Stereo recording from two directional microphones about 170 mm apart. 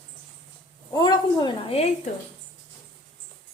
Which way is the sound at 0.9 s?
25° left (ahead or behind).